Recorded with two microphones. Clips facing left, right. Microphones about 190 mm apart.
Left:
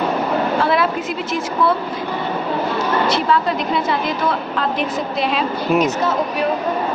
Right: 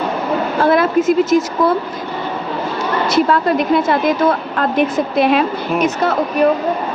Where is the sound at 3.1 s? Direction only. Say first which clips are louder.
Right 4 dB; 50° right (ahead or behind).